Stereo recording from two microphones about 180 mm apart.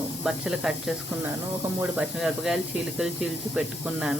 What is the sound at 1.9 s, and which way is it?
Speech, 5° right (ahead or behind).